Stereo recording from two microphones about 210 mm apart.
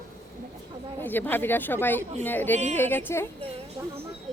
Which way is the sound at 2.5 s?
35° right (ahead or behind).